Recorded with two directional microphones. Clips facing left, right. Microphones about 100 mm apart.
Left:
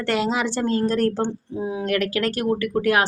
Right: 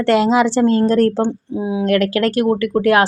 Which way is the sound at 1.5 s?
15° right (ahead or behind).